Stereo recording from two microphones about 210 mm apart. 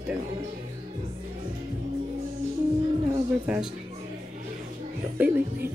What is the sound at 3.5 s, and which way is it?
Speech, 5° right (ahead or behind).